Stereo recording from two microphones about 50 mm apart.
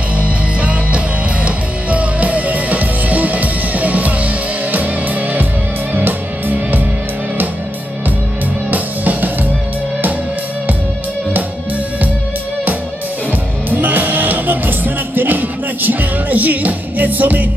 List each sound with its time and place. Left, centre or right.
0.2 s music: right
5.9 s music: right
8.6 s music: right
13.7 s music: right